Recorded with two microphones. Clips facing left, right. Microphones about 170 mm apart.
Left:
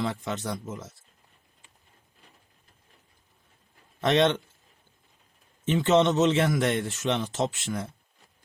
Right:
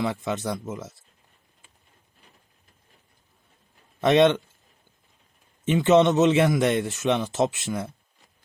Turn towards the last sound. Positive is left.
turn(degrees=-15)  # may be behind; listen again after turning